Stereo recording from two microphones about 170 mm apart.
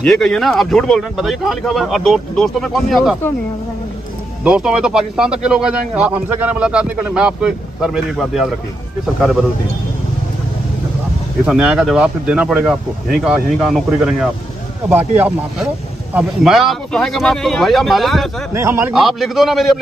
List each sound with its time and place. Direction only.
0.0 s speech: 5° left (ahead or behind)
4.5 s speech: 5° right (ahead or behind)
11.4 s speech: 5° right (ahead or behind)
18.5 s speech: 15° right (ahead or behind)
18.9 s speech: centre (ahead or behind)